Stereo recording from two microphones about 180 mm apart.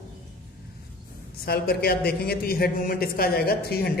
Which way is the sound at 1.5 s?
60° left (ahead or behind).